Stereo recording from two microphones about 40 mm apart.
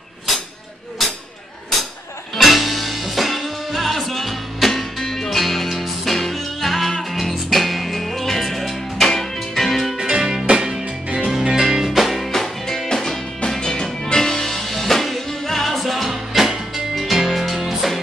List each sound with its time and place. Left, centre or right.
2.3 s music: centre
9.9 s music: centre
11.2 s music: centre
13.5 s music: centre